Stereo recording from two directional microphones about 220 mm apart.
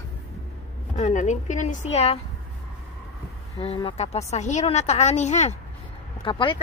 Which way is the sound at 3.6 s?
25° left (ahead or behind).